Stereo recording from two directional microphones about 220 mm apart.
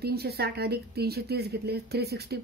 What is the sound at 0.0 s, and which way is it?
Speech, 45° right (ahead or behind).